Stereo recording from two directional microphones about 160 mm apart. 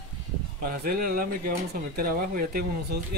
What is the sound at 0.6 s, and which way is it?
Speech, 65° right (ahead or behind).